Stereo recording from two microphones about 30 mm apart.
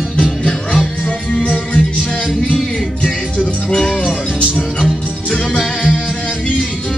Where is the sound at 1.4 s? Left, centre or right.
Left.